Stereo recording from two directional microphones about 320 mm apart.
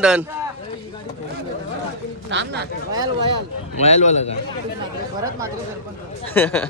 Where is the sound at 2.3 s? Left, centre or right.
Right.